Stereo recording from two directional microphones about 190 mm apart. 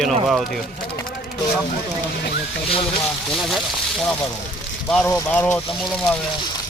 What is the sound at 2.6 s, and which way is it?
Speech, 30° left (ahead or behind).